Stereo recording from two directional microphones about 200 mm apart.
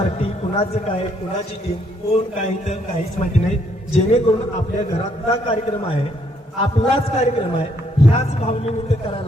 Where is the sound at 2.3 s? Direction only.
40° left (ahead or behind).